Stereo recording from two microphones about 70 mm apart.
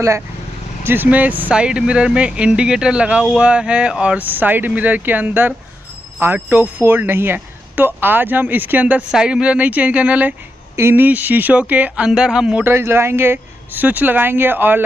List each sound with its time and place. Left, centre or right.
0.8 s speech: right
9.1 s speech: centre
10.8 s speech: right
11.1 s speech: right
12.1 s speech: centre
12.6 s speech: right